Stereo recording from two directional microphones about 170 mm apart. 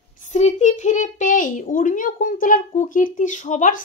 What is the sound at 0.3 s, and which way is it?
A woman's voice, 45° left (ahead or behind).